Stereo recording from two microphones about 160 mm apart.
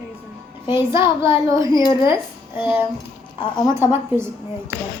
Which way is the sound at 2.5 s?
15° right (ahead or behind).